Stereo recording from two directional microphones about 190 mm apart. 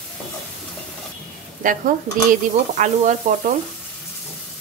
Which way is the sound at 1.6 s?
45° right (ahead or behind).